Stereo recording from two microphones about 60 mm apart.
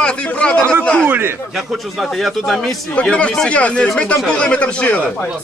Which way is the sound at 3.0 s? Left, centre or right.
Centre.